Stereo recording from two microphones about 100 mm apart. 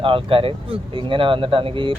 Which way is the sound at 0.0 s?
60° right (ahead or behind).